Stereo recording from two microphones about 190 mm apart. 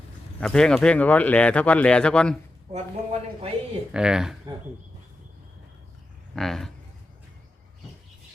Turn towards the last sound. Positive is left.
turn(degrees=0)  # may be behind; listen again after turning